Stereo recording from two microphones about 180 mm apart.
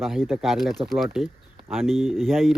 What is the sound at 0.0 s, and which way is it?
Speech, centre (ahead or behind).